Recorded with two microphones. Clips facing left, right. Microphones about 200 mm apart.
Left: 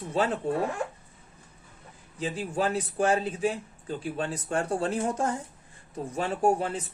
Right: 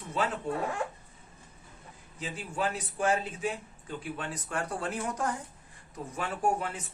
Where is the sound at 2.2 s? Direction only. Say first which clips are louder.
Left 5 dB; 35° left (ahead or behind).